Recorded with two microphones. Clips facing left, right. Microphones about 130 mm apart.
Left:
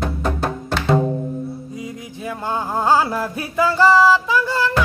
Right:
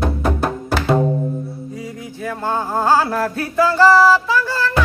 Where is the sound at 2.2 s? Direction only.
15° left (ahead or behind).